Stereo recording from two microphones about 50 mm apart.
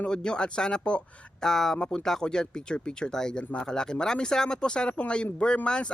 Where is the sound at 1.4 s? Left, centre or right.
Centre.